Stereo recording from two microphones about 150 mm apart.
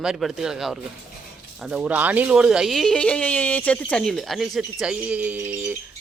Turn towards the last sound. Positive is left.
turn(degrees=-15)  # may be behind; listen again after turning